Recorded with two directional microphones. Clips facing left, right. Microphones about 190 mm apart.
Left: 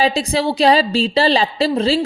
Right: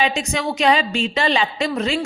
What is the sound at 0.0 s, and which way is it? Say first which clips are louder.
A woman's voice: left 4 dB; 35° left (ahead or behind).